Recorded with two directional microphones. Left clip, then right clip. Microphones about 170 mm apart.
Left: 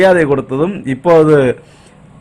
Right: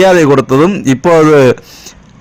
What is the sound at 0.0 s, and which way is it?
A man's voice, 25° right (ahead or behind).